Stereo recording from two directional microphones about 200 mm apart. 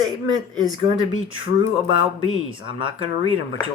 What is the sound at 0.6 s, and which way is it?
Speech, 20° right (ahead or behind).